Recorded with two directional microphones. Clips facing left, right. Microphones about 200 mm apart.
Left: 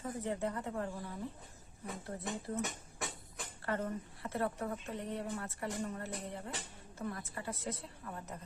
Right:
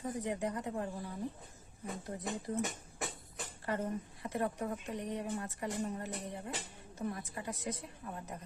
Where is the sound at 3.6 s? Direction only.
15° right (ahead or behind).